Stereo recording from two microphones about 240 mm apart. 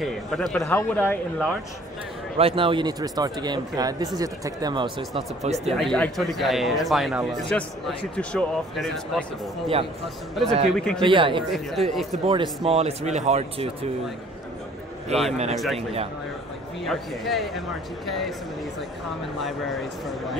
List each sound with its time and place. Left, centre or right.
0.0 s a man's voice: centre
2.3 s speech: right
5.8 s a man's voice: centre
10.7 s a man's voice: centre
11.0 s speech: right
11.5 s a man's voice: centre
12.3 s speech: right
15.1 s speech: right
15.5 s a man's voice: centre
16.8 s a man's voice: centre
19.4 s a man's voice: centre